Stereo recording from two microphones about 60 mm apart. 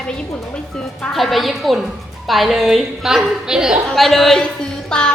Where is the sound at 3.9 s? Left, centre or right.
Centre.